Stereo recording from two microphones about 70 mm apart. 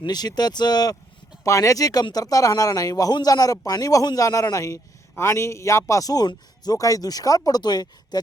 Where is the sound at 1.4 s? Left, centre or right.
Left.